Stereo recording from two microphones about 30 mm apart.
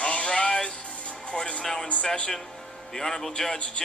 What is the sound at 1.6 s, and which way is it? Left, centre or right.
Speech, centre.